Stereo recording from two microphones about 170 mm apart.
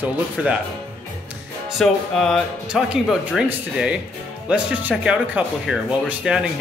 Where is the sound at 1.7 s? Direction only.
Centre (ahead or behind).